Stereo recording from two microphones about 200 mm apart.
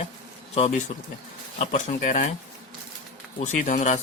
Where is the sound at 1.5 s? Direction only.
40° left (ahead or behind).